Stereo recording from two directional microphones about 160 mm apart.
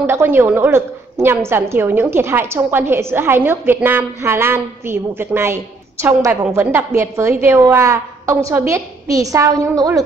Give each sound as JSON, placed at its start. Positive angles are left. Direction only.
{"t": 0.0, "sound": "a woman's voice", "side_deg": -15}